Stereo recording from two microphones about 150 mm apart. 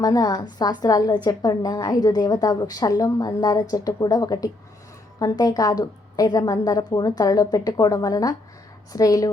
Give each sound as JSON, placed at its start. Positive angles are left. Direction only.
{"t": 0.0, "sound": "a woman's voice", "side_deg": 25}